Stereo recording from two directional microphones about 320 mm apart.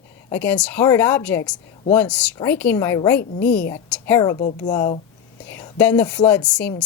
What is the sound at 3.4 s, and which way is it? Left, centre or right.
Speech, left.